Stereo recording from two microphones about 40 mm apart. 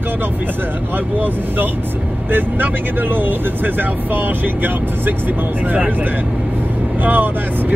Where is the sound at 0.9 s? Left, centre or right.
Right.